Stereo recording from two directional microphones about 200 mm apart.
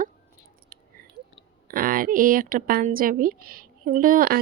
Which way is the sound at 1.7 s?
45° right (ahead or behind).